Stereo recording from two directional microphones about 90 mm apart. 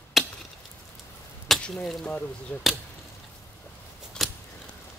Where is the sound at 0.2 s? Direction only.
Centre (ahead or behind).